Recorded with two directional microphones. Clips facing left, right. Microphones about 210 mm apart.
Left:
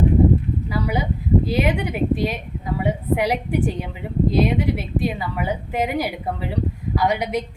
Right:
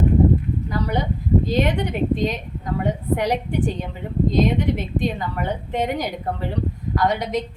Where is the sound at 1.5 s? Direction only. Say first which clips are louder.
Even; 10° left (ahead or behind).